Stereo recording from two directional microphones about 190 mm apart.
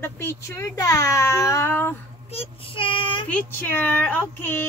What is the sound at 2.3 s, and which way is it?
Speech, 30° left (ahead or behind).